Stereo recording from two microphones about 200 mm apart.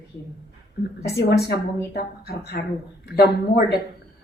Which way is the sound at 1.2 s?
55° left (ahead or behind).